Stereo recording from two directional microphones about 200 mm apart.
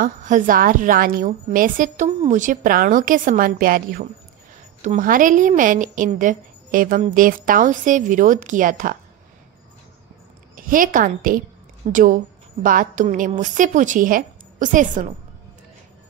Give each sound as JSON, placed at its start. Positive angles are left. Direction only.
{"t": 0.0, "sound": "a woman's voice", "side_deg": -40}
{"t": 10.5, "sound": "a woman's voice", "side_deg": -45}